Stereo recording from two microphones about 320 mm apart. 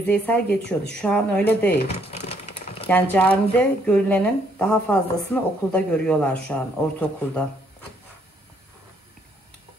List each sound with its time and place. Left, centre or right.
0.0 s a woman's voice: centre
1.7 s a sound: centre
2.9 s a woman's voice: centre